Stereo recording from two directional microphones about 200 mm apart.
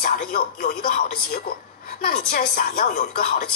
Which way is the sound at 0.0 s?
45° left (ahead or behind).